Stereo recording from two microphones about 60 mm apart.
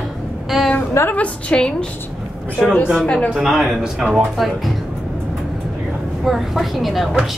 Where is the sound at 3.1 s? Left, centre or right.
Left.